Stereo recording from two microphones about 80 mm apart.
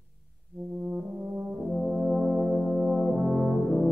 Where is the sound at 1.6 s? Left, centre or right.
Centre.